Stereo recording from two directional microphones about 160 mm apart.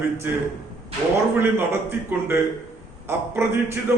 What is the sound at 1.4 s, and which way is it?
Speech, 15° right (ahead or behind).